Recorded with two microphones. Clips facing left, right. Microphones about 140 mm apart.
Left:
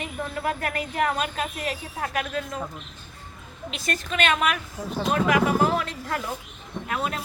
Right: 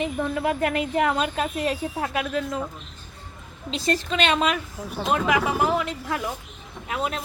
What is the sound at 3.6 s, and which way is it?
Speech, 25° right (ahead or behind).